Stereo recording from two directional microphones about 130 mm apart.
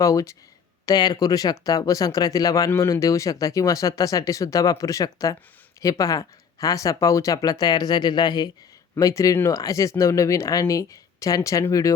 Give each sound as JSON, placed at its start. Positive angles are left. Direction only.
{"t": 0.0, "sound": "speech", "side_deg": 25}